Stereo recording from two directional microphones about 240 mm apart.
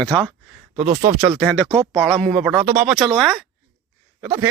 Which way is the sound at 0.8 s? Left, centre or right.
Right.